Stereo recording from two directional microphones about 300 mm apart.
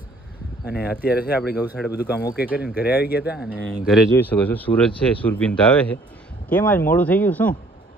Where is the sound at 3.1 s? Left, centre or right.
Centre.